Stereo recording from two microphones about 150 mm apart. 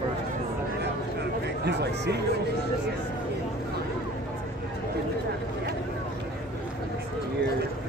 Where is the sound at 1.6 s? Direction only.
90° right.